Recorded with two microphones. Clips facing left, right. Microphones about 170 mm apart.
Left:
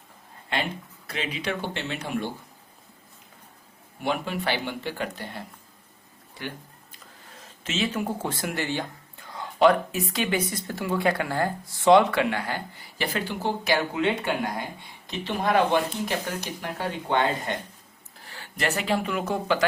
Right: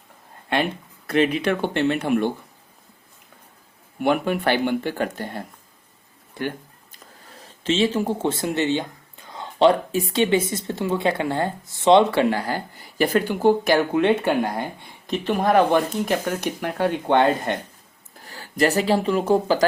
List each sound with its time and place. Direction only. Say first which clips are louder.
0.5 s speech: right 6 dB; 55° right (ahead or behind)
4.0 s speech: right 7 dB; 55° right (ahead or behind)
6.9 s speech: right 4 dB; 35° right (ahead or behind); by 17.2 s 60° right (ahead or behind)
18.2 s speech: right 9 dB; 40° right (ahead or behind)